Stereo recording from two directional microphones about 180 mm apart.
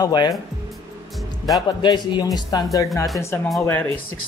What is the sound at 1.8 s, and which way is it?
Speech, 25° left (ahead or behind).